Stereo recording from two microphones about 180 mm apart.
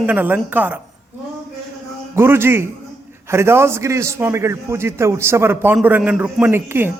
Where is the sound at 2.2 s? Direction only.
15° right (ahead or behind).